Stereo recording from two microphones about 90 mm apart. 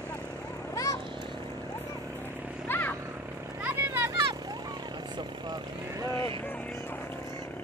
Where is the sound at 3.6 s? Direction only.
25° right (ahead or behind).